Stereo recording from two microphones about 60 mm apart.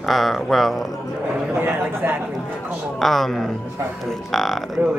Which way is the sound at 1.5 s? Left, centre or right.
Right.